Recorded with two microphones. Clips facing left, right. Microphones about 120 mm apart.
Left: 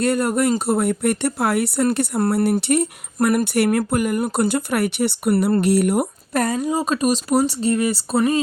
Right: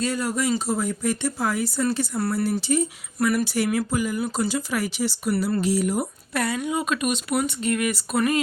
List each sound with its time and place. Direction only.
0.0 s speech: 60° left (ahead or behind)
6.3 s speech: 40° left (ahead or behind)